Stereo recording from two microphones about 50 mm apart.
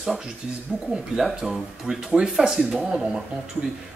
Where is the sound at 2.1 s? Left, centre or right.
Centre.